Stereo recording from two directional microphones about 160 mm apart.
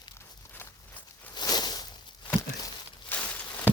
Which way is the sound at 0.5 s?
10° left (ahead or behind).